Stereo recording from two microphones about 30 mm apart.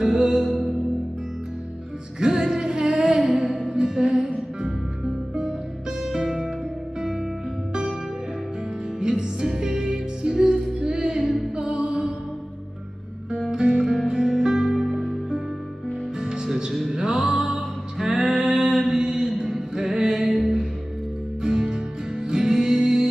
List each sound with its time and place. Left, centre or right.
0.0 s music: centre
2.1 s music: right
3.0 s music: centre
9.0 s music: right
10.9 s music: right
11.5 s music: right
13.5 s music: right; by 15.1 s centre
16.2 s music: right
17.2 s music: centre
18.0 s music: right
18.4 s music: centre
21.4 s music: right